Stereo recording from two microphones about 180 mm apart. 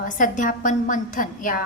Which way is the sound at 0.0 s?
45° left (ahead or behind).